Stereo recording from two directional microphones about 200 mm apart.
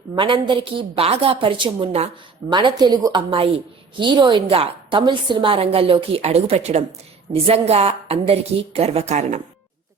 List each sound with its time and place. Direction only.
0.2 s a woman's voice: 25° right (ahead or behind)